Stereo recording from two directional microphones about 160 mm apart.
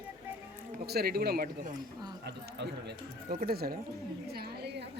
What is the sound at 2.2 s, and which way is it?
Speech, 90° right.